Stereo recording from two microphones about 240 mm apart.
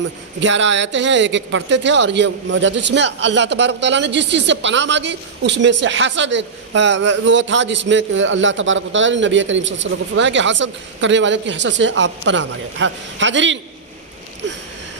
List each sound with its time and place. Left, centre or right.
0.3 s a man's voice: right